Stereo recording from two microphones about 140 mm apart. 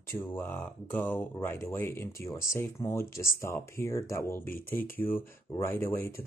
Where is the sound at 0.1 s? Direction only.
15° left (ahead or behind).